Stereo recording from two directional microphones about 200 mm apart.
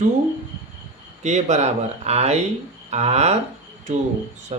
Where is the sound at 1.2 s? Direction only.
35° right (ahead or behind).